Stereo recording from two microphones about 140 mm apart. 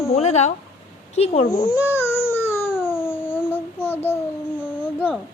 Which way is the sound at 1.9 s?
15° left (ahead or behind).